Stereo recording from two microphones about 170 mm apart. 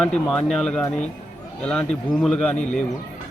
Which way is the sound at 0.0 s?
5° left (ahead or behind).